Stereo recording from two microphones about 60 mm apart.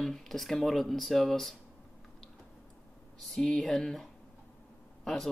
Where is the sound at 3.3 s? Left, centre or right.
Centre.